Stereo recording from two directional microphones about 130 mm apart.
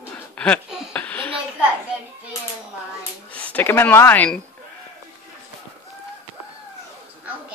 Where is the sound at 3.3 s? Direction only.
10° left (ahead or behind).